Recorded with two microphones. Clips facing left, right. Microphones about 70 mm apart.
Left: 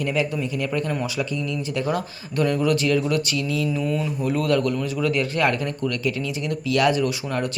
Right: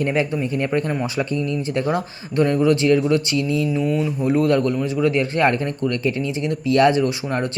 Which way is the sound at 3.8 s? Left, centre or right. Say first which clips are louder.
Right 4 dB; centre.